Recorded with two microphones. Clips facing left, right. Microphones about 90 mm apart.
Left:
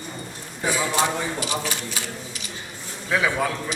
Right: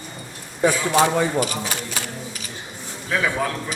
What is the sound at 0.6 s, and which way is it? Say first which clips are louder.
A man's voice: right 5 dB; 50° right (ahead or behind).